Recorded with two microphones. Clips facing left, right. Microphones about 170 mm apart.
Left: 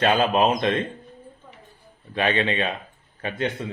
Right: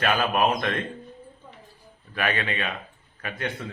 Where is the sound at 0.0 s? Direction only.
25° left (ahead or behind).